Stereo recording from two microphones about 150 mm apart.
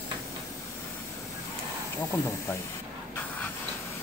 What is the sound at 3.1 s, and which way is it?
Hiss, 10° left (ahead or behind).